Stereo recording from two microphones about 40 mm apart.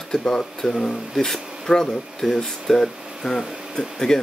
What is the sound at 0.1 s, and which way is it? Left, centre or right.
Speech, centre.